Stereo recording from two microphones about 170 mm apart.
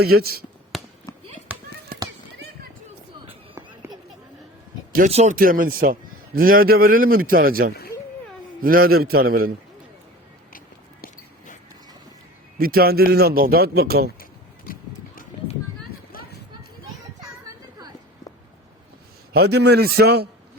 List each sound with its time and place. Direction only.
0.0 s a man's voice: 65° right (ahead or behind)
0.7 s a sound: centre (ahead or behind)
1.9 s run: 55° right (ahead or behind)
3.8 s a sound: 15° right (ahead or behind)
5.0 s a man's voice: 40° right (ahead or behind); by 9.5 s 60° right (ahead or behind)
12.5 s a man's voice: 60° right (ahead or behind)
14.7 s clip-clop: 55° left (ahead or behind)
16.1 s run: 60° left (ahead or behind)
19.3 s a man's voice: 70° right (ahead or behind)